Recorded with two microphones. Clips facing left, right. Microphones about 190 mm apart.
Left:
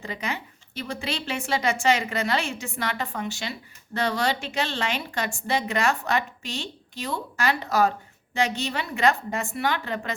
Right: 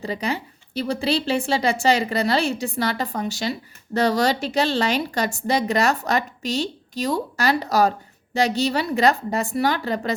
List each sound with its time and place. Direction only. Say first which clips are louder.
0.0 s a woman's voice: right 6 dB; 35° right (ahead or behind)